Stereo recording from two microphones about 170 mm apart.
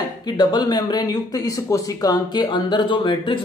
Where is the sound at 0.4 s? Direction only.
25° left (ahead or behind).